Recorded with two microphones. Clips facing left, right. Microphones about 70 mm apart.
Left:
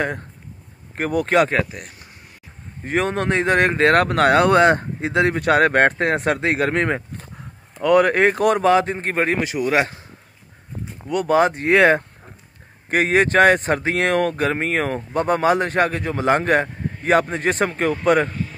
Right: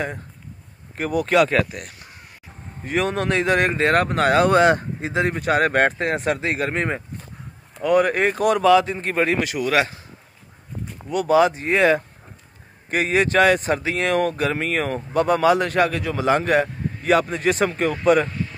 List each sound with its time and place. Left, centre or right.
0.9 s speech: left
2.8 s speech: left
5.0 s speech: left
11.1 s speech: left
11.6 s speech: left
12.9 s speech: left